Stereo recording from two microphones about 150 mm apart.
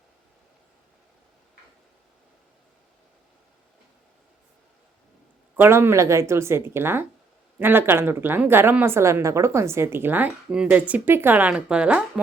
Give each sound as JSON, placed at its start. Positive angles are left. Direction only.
{"t": 5.5, "sound": "a woman's voice", "side_deg": -15}